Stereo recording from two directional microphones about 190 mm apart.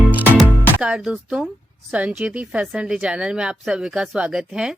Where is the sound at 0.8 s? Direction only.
5° right (ahead or behind).